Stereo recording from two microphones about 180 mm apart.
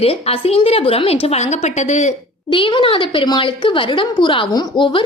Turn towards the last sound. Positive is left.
turn(degrees=25)  # may be behind; listen again after turning